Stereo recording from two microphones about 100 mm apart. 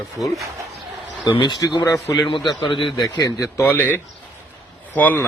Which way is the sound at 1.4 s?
40° left (ahead or behind).